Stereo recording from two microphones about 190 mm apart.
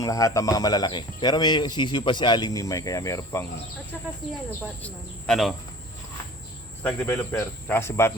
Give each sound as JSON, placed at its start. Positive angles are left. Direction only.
{"t": 0.0, "sound": "speech", "side_deg": 20}
{"t": 4.8, "sound": "speech", "side_deg": 5}
{"t": 6.8, "sound": "speech", "side_deg": 15}